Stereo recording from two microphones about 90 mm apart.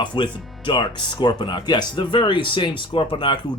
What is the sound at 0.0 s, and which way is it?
Speech, 60° left (ahead or behind).